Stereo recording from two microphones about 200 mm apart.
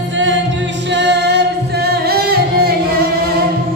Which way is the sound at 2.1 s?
50° right (ahead or behind).